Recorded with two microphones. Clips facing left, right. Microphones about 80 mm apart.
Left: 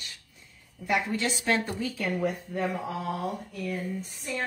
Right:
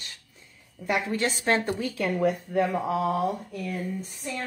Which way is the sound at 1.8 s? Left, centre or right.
Right.